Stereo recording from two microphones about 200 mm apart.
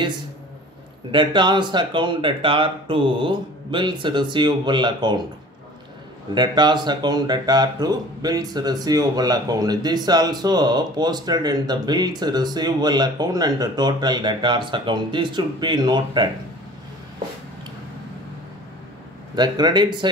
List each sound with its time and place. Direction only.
1.1 s speech: 25° right (ahead or behind)
6.3 s speech: 20° right (ahead or behind)
19.3 s speech: 20° right (ahead or behind)